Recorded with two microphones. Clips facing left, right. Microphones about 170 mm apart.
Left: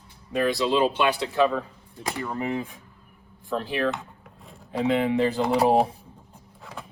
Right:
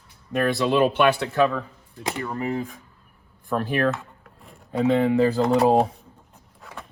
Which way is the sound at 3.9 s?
Centre (ahead or behind).